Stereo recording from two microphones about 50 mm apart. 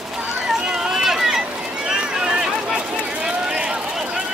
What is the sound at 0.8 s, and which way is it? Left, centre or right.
Run, centre.